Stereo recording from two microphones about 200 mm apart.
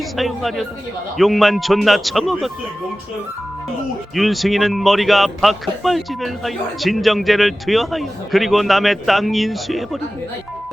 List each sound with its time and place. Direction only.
0.2 s a man's voice: centre (ahead or behind)
4.1 s a man's voice: centre (ahead or behind)